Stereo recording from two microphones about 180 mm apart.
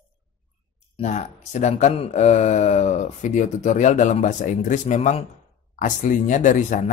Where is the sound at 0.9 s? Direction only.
40° left (ahead or behind).